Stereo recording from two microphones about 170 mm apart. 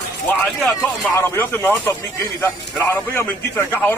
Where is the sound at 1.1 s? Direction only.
10° left (ahead or behind).